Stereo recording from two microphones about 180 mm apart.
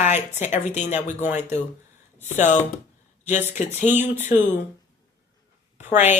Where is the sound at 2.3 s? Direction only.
40° left (ahead or behind).